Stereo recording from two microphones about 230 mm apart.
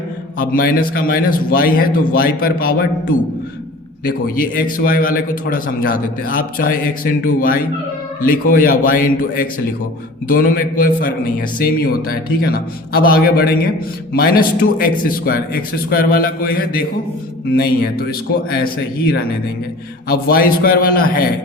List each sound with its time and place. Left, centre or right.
0.3 s a man's voice: left
4.0 s a man's voice: left
20.1 s a man's voice: left